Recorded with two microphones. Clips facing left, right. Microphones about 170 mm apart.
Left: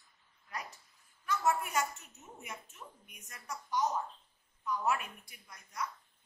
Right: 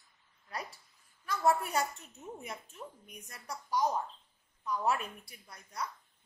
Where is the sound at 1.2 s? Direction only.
30° right (ahead or behind).